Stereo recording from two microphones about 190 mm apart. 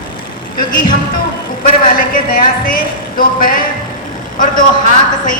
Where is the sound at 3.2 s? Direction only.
50° left (ahead or behind).